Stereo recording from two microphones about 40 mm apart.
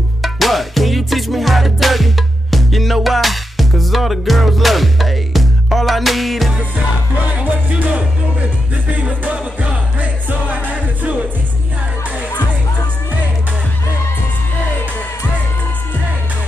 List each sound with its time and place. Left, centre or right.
0.2 s music: centre
10.5 s music: right